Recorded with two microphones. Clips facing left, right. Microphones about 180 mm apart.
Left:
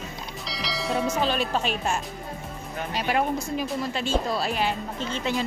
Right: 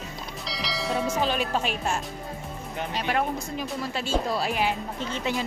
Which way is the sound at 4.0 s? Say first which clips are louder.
Right 1 dB; 10° right (ahead or behind).